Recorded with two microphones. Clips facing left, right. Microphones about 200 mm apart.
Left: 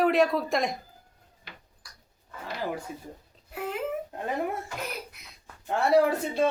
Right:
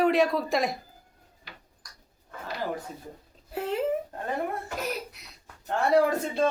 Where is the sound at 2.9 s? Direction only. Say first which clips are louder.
Left 2 dB; 10° left (ahead or behind).